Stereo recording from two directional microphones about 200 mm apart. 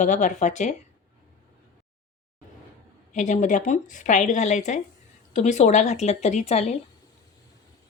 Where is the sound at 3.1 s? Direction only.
35° left (ahead or behind).